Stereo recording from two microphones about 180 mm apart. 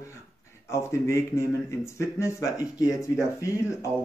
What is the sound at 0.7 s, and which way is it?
Speech, 15° left (ahead or behind).